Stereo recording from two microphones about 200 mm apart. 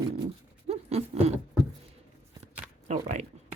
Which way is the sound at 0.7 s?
30° right (ahead or behind).